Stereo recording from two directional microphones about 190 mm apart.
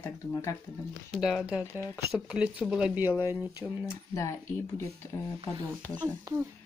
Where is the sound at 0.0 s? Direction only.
15° left (ahead or behind).